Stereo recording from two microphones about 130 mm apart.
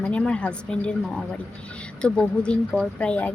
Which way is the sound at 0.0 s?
10° left (ahead or behind).